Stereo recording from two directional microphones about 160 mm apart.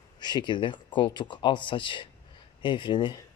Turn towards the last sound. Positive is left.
turn(degrees=30)  # may be behind; listen again after turning